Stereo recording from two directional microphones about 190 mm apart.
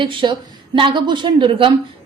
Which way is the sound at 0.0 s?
25° right (ahead or behind).